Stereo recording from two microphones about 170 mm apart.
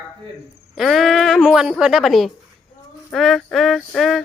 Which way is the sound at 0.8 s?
Centre (ahead or behind).